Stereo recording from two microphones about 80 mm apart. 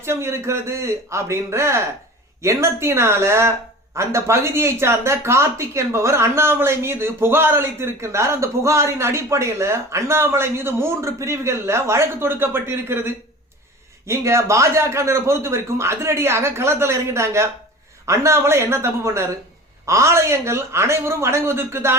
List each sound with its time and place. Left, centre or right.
0.0 s speech: right